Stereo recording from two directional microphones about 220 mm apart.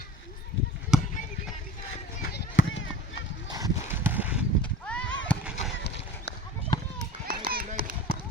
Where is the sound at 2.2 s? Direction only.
45° left (ahead or behind).